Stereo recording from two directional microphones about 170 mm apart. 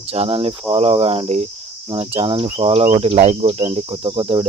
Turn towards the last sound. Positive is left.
turn(degrees=-30)  # may be behind; listen again after turning